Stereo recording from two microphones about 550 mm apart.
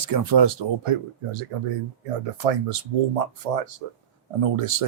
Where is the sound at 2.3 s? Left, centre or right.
Right.